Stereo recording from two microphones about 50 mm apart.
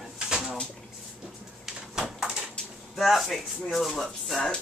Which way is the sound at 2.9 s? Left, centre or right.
Centre.